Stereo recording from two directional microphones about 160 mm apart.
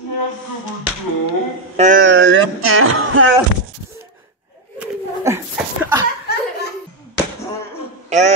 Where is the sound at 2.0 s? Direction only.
90° right.